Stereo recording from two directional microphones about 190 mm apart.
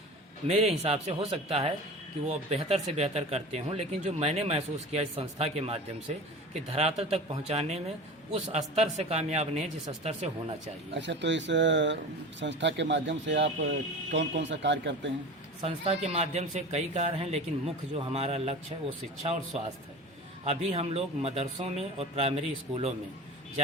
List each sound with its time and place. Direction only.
0.4 s speech: 35° right (ahead or behind)
10.9 s speech: 70° right (ahead or behind)
15.6 s speech: 35° right (ahead or behind)
20.4 s speech: 35° right (ahead or behind)